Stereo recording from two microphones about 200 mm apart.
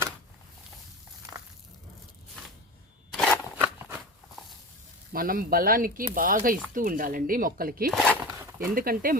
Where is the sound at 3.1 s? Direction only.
5° left (ahead or behind).